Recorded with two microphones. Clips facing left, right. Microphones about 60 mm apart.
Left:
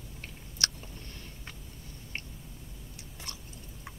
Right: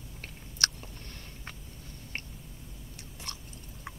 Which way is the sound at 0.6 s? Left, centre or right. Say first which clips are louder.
Right 3 dB; right.